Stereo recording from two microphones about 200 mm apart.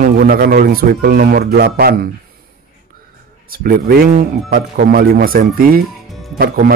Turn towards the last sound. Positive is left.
turn(degrees=-50)  # may be behind; listen again after turning